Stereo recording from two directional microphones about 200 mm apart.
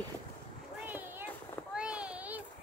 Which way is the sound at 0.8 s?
10° right (ahead or behind).